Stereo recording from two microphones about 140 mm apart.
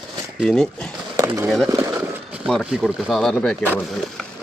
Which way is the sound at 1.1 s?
20° right (ahead or behind).